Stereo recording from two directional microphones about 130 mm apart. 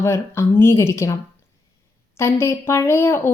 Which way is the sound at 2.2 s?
20° left (ahead or behind).